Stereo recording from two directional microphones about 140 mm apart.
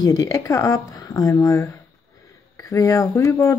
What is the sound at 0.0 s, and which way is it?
Speech, 25° left (ahead or behind).